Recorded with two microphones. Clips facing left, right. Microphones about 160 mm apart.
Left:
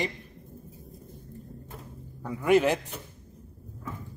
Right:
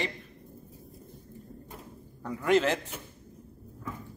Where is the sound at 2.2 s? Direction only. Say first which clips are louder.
Left 3 dB; 10° left (ahead or behind).